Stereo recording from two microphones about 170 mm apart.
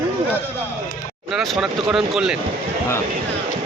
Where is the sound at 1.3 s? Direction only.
Centre (ahead or behind).